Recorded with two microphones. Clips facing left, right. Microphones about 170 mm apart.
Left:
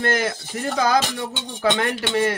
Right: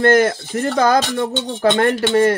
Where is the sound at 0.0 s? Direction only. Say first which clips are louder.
Right 9 dB; 50° right (ahead or behind).